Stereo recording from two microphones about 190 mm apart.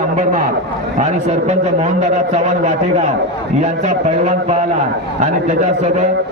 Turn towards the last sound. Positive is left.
turn(degrees=-40)  # may be behind; listen again after turning